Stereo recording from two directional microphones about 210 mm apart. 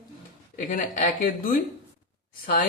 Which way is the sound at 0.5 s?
40° left (ahead or behind).